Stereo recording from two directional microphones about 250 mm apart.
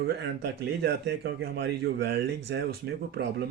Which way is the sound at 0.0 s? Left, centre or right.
Right.